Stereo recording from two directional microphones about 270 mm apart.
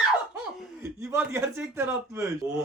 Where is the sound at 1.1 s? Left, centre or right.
Centre.